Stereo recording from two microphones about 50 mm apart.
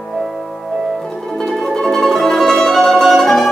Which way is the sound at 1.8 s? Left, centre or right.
Centre.